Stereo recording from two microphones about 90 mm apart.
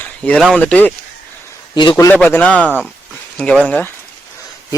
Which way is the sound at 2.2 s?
15° left (ahead or behind).